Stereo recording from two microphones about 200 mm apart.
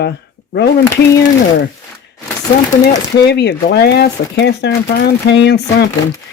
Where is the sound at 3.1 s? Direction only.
55° left (ahead or behind).